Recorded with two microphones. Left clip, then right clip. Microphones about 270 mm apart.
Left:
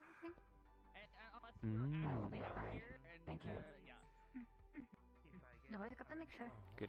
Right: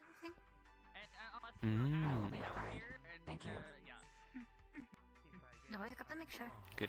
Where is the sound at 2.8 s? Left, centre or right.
Right.